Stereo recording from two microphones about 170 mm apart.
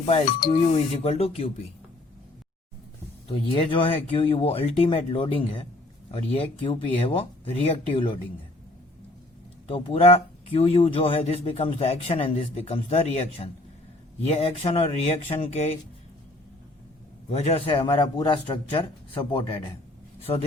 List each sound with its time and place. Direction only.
0.0 s speech: 35° left (ahead or behind)
0.3 s speech: 60° left (ahead or behind)
0.5 s speech: 35° left (ahead or behind)
3.3 s speech: 30° left (ahead or behind)
9.6 s speech: 35° left (ahead or behind)
17.2 s speech: 40° left (ahead or behind)